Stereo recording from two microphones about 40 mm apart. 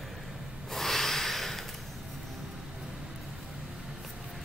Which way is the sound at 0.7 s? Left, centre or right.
Centre.